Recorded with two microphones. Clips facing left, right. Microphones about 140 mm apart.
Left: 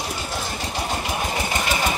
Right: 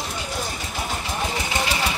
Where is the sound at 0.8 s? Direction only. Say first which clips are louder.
Left 1 dB; 45° left (ahead or behind).